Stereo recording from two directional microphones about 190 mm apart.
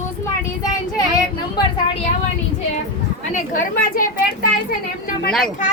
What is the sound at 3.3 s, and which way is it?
Speech, 45° left (ahead or behind).